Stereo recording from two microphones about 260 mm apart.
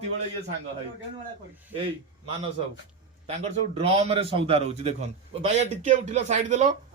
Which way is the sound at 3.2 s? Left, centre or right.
Right.